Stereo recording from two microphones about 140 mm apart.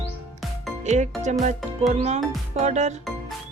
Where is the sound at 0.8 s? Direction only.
60° right (ahead or behind).